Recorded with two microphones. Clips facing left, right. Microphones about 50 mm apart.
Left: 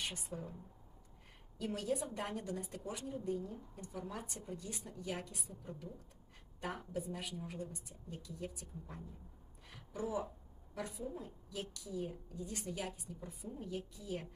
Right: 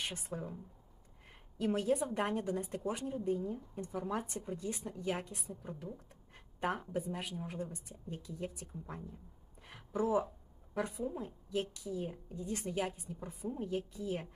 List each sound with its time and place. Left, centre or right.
0.0 s speech: right
1.5 s a woman's voice: right
9.6 s a sound: right
10.8 s a woman's voice: right